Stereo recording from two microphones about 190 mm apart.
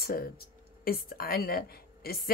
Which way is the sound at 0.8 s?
50° left (ahead or behind).